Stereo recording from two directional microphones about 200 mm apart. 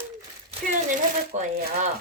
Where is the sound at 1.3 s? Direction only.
35° right (ahead or behind).